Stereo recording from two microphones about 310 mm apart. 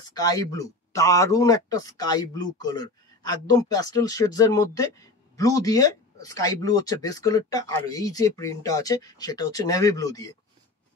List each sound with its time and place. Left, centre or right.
0.1 s speech: centre